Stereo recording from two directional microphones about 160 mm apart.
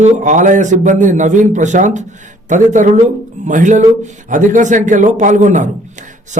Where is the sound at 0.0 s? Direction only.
50° right (ahead or behind).